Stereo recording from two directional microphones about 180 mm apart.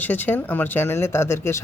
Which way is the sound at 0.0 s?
10° left (ahead or behind).